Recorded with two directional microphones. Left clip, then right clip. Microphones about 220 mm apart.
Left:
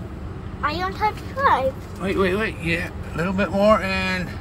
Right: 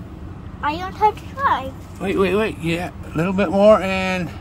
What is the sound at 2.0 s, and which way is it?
Speech, 50° right (ahead or behind).